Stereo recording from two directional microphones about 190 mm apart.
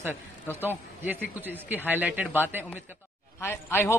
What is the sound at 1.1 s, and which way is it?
A man's voice, 10° right (ahead or behind).